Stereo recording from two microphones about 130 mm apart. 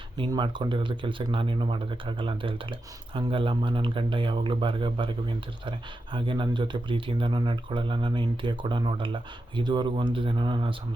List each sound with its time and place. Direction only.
0.3 s speech: 35° right (ahead or behind)